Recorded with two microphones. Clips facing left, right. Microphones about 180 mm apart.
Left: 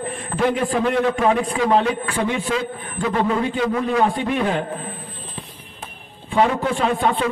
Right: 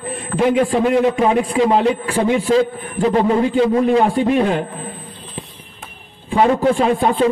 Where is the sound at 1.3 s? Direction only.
25° right (ahead or behind).